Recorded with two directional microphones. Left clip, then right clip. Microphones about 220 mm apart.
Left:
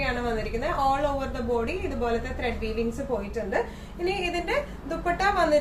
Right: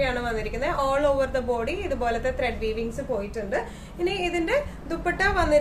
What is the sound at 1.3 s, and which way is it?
A woman's voice, 40° right (ahead or behind).